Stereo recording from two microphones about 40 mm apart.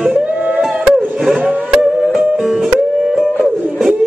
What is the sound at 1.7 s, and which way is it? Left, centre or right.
Music, centre.